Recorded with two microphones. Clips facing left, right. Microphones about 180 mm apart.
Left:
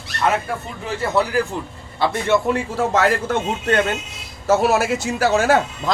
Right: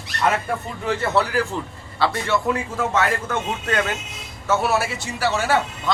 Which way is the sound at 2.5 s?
35° left (ahead or behind).